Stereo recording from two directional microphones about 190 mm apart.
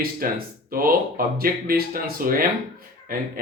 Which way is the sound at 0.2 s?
50° right (ahead or behind).